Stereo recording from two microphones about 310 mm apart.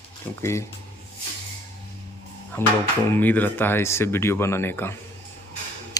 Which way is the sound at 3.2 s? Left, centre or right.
Centre.